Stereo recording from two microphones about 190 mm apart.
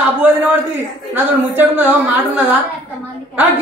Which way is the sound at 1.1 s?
10° right (ahead or behind).